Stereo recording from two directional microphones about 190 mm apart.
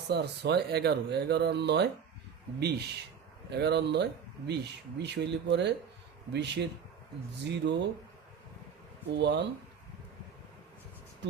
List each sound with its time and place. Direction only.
0.1 s speech: 60° right (ahead or behind)
9.1 s speech: 65° right (ahead or behind)
11.2 s speech: 65° right (ahead or behind)